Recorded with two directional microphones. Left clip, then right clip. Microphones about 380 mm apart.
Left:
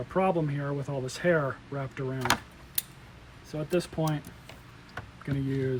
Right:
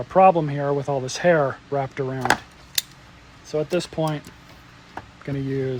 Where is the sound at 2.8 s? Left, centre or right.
Right.